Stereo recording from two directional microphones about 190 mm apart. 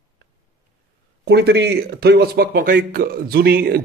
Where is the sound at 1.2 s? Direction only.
60° right (ahead or behind).